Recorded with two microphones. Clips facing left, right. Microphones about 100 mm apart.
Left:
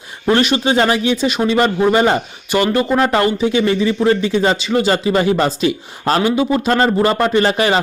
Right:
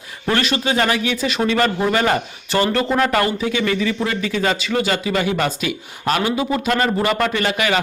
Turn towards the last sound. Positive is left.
turn(degrees=30)  # may be behind; listen again after turning